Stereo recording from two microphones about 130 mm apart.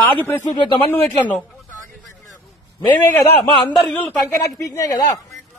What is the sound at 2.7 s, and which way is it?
A man's voice, 15° left (ahead or behind).